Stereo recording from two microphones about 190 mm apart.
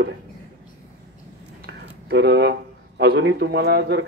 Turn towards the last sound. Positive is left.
turn(degrees=-65)  # may be behind; listen again after turning